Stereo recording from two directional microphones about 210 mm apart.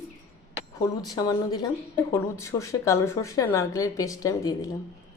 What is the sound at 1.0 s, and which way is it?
A woman's voice, 20° left (ahead or behind).